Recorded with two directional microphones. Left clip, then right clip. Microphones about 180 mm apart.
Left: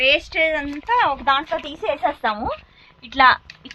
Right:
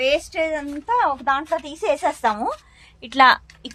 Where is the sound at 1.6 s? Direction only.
55° right (ahead or behind).